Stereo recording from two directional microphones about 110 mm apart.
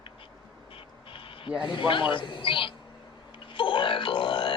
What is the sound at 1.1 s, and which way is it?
Quack, 55° left (ahead or behind).